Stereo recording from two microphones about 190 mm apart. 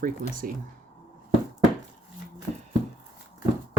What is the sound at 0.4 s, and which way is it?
Speech, 50° right (ahead or behind).